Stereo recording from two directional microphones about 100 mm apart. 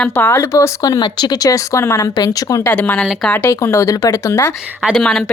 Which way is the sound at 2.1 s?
40° left (ahead or behind).